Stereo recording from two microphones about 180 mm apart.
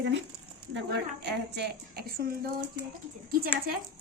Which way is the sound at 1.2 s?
70° right (ahead or behind).